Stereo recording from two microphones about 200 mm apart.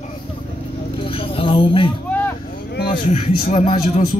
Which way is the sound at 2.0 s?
10° left (ahead or behind).